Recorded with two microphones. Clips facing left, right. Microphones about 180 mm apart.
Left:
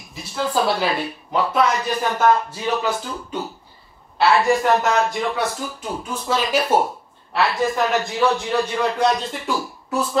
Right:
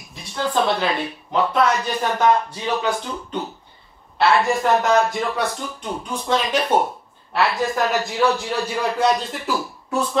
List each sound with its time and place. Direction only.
0.1 s speech: 5° left (ahead or behind)